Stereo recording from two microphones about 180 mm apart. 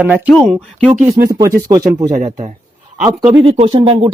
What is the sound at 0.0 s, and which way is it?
Speech, 10° right (ahead or behind).